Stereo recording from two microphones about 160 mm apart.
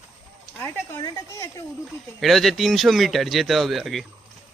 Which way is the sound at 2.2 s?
Centre (ahead or behind).